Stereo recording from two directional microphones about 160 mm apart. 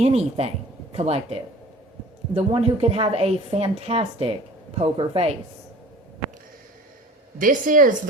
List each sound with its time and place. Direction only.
0.0 s a woman's voice: 40° right (ahead or behind)
7.3 s speech: 55° right (ahead or behind)